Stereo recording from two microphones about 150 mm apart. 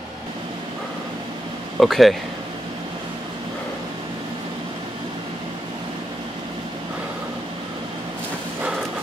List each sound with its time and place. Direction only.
1.8 s speech: centre (ahead or behind)